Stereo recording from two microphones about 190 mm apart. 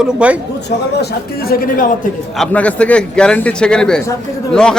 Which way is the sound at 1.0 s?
55° left (ahead or behind).